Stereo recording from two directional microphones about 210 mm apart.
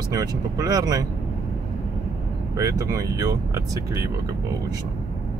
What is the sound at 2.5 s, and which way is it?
Speech, 15° right (ahead or behind).